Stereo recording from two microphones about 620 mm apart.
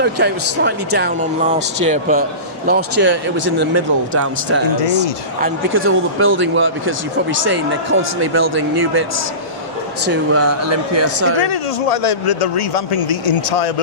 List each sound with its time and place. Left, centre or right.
0.0 s speech: centre
8.7 s speech: right
10.1 s speech: right
11.3 s a man's voice: left